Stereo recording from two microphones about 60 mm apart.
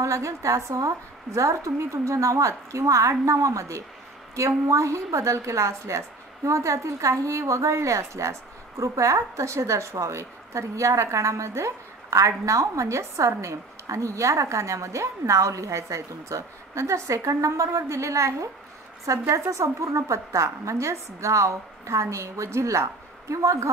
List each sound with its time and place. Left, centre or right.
0.0 s a woman's voice: right